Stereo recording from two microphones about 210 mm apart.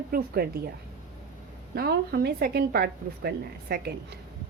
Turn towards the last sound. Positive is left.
turn(degrees=-45)  # may be behind; listen again after turning